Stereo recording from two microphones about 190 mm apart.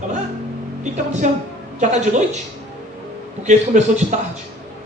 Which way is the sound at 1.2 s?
40° right (ahead or behind).